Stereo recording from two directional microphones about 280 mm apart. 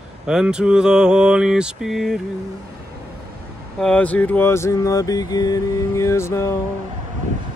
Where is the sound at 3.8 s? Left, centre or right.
Centre.